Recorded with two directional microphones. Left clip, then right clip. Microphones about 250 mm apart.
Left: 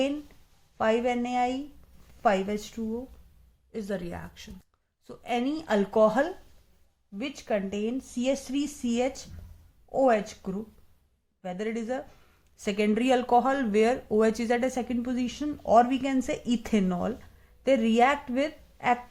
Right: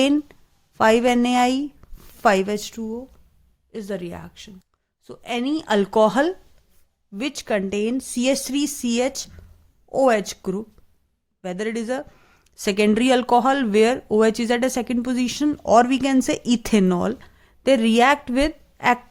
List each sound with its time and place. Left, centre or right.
0.8 s speech: right